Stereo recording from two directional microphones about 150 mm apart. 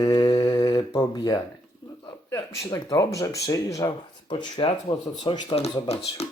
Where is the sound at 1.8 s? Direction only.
35° left (ahead or behind).